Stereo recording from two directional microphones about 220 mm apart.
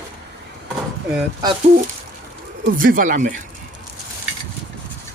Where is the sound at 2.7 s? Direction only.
40° right (ahead or behind).